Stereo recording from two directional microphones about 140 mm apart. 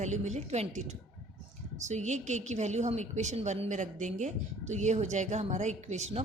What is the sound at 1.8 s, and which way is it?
A woman's voice, 55° right (ahead or behind).